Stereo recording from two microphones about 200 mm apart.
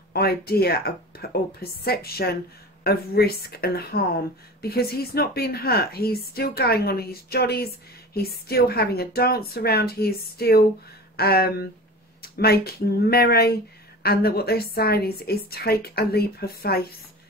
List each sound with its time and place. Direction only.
0.1 s speech: 50° left (ahead or behind)